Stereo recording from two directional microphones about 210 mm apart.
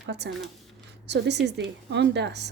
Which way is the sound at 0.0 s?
55° right (ahead or behind).